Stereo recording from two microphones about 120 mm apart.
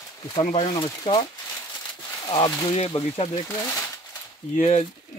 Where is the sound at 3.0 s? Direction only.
60° left (ahead or behind).